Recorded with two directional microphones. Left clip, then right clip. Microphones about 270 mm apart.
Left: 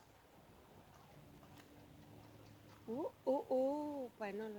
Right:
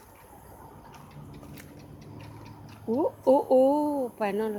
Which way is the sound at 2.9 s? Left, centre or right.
Centre.